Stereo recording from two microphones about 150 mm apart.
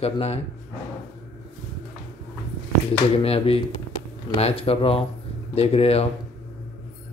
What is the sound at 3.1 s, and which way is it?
Speech, 40° left (ahead or behind).